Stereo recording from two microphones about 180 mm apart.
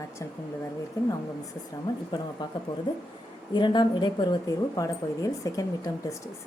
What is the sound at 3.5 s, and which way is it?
A woman's voice, 25° left (ahead or behind).